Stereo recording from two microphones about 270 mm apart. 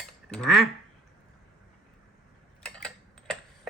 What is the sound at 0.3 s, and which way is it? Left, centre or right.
Speech, centre.